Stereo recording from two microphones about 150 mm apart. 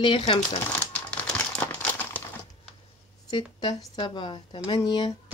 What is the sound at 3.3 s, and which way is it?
A woman's voice, 30° left (ahead or behind).